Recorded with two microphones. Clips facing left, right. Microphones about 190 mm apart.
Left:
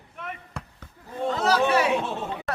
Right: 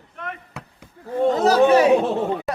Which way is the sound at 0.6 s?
5° right (ahead or behind).